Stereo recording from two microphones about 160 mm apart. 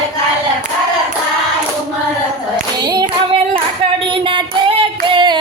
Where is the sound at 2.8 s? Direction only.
25° right (ahead or behind).